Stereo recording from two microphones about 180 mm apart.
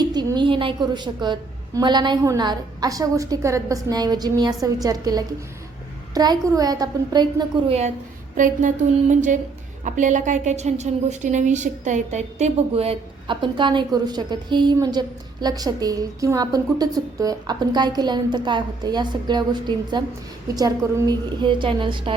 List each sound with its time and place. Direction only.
0.0 s a woman's voice: 25° right (ahead or behind)
8.4 s a sound: 45° right (ahead or behind)
9.8 s a woman's voice: 45° right (ahead or behind); by 22.1 s 25° right (ahead or behind)